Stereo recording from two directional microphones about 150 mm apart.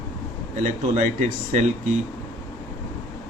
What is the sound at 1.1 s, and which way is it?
Speech, 55° right (ahead or behind).